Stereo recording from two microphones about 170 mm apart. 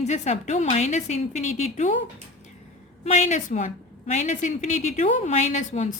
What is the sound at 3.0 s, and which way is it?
A woman's voice, 40° left (ahead or behind).